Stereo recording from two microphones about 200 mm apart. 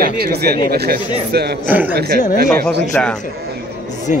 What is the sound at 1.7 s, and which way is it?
Speech, 10° right (ahead or behind).